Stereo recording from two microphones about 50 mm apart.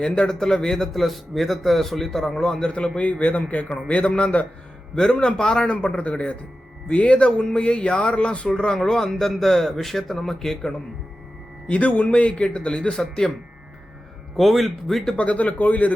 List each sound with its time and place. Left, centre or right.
0.0 s a man's voice: centre
0.9 s speech: centre
2.6 s a man's voice: left
4.9 s a man's voice: centre
5.6 s a man's voice: left
8.4 s speech: centre
11.7 s a man's voice: left
14.3 s speech: centre
15.1 s speech: left